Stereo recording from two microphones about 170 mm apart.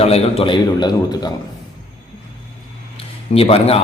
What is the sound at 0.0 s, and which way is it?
A man's voice, 35° left (ahead or behind).